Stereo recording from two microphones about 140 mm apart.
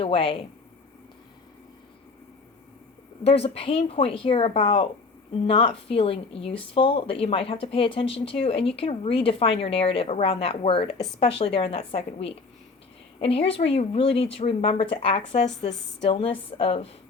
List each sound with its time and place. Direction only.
0.0 s speech: 40° left (ahead or behind)
3.2 s speech: 45° left (ahead or behind)